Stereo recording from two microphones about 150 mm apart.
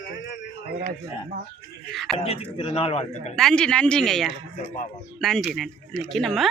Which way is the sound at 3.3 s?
5° left (ahead or behind).